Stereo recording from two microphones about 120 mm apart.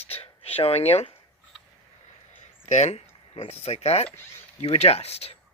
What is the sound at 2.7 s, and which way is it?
Speech, 70° left (ahead or behind).